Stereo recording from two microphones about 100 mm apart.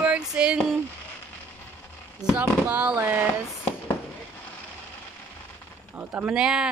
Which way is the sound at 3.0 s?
20° right (ahead or behind).